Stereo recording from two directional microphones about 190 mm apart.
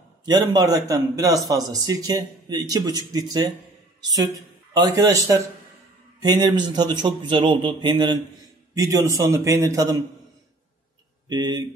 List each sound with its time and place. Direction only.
0.2 s a man's voice: 20° right (ahead or behind)
11.2 s a man's voice: 20° right (ahead or behind)